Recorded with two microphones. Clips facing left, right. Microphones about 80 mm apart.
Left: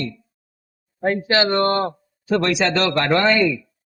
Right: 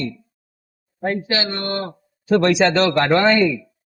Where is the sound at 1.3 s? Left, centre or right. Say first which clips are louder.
Left 6 dB; left.